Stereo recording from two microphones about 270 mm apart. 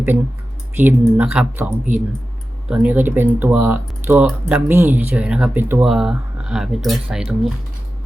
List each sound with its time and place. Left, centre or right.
0.8 s speech: centre